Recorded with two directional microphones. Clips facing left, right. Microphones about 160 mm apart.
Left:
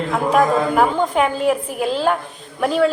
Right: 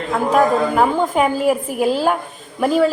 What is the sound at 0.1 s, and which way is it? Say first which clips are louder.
A woman's voice: right 1 dB; centre (ahead or behind).